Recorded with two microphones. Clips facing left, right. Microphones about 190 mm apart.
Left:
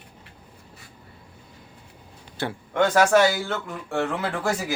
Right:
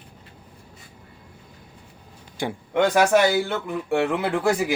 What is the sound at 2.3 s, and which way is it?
Speech, 15° right (ahead or behind).